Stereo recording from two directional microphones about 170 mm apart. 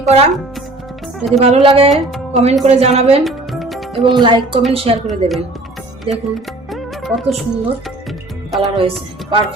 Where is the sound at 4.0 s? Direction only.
30° right (ahead or behind).